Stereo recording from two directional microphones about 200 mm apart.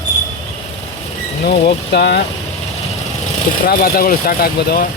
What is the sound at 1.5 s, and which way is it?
Speech, 55° left (ahead or behind).